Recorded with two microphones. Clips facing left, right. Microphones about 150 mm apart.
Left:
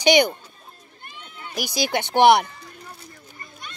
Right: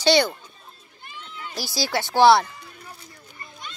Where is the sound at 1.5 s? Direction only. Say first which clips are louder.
Left 2 dB; 15° left (ahead or behind).